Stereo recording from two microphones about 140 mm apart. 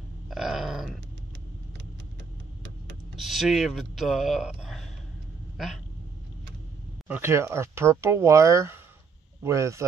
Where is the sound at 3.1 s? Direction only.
Centre (ahead or behind).